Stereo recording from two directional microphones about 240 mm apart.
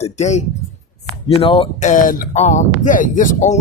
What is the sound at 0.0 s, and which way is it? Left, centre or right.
Speech, left.